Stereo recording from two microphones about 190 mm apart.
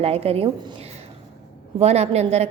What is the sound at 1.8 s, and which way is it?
Speech, 35° right (ahead or behind).